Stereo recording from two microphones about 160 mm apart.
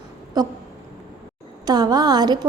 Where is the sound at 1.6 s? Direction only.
25° right (ahead or behind).